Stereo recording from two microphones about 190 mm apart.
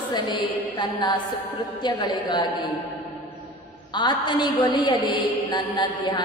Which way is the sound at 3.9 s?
25° left (ahead or behind).